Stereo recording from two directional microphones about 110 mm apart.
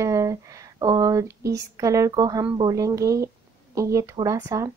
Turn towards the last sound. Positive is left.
turn(degrees=-35)  # may be behind; listen again after turning